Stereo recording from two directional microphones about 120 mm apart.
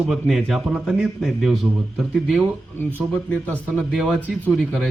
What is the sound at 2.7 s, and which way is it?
Speech, 10° left (ahead or behind).